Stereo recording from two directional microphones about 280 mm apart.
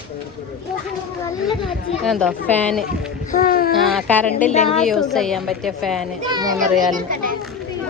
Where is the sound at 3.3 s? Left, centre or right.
Left.